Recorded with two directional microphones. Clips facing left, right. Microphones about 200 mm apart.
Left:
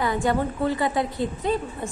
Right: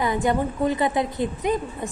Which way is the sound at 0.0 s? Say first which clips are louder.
Right 1 dB; 20° right (ahead or behind).